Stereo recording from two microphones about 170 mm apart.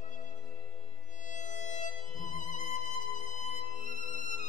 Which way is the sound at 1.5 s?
45° left (ahead or behind).